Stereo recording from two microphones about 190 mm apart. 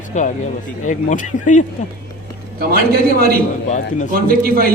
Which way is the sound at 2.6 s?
50° right (ahead or behind).